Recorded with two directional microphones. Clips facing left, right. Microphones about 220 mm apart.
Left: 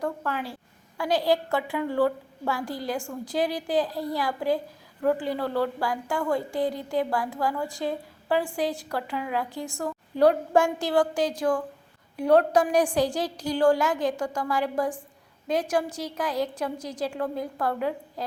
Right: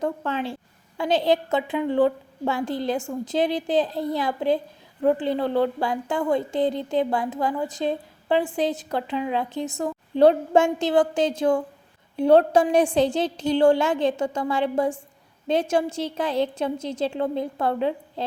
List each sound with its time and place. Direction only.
0.0 s a woman's voice: 20° right (ahead or behind)